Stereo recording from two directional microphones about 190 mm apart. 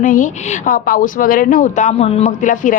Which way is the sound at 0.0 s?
45° left (ahead or behind).